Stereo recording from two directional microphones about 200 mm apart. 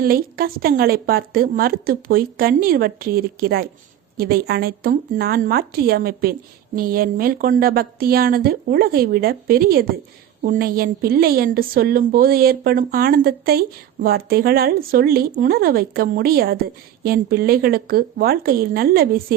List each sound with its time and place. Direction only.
0.0 s a woman's voice: 50° right (ahead or behind)